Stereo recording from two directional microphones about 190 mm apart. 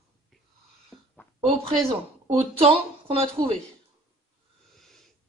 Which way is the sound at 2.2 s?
30° right (ahead or behind).